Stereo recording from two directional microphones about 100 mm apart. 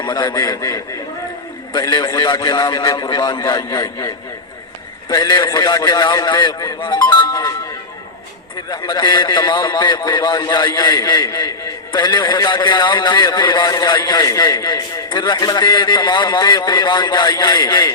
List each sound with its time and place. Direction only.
0.0 s a man's voice: 45° left (ahead or behind)
2.1 s a man's voice: 45° left (ahead or behind)
7.3 s a man's voice: 35° left (ahead or behind)
8.7 s a man's voice: 45° left (ahead or behind)